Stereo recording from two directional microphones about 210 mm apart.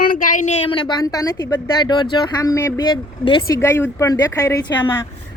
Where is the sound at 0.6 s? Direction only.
20° left (ahead or behind).